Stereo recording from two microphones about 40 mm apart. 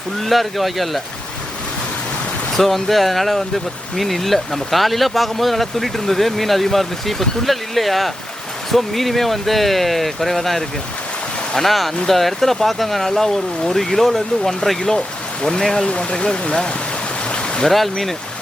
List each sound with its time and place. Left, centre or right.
0.2 s speech: centre
2.5 s speech: centre; by 16.7 s left
17.3 s a sound: left
17.7 s speech: centre